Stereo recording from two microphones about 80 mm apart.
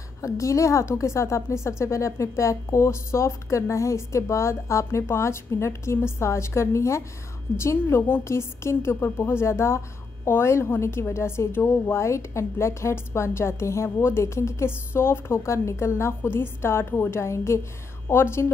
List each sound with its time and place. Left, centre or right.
0.2 s a woman's voice: left